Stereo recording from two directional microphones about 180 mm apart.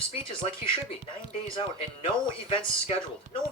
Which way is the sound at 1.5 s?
30° left (ahead or behind).